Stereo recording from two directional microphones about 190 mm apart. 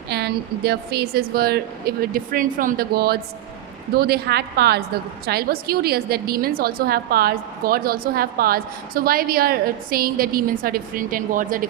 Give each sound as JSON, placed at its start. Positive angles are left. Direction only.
{"t": 0.1, "sound": "a woman's voice", "side_deg": -60}